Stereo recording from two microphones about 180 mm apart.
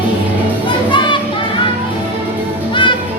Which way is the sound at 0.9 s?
25° left (ahead or behind).